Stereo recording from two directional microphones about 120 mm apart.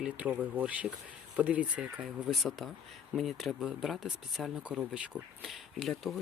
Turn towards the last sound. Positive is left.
turn(degrees=0)  # may be behind; listen again after turning